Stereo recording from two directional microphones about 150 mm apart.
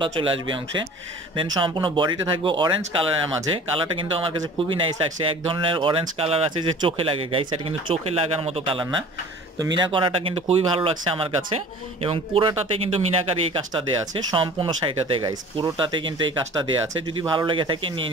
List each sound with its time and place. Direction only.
0.0 s speech: 35° right (ahead or behind)
14.3 s speech: 35° right (ahead or behind)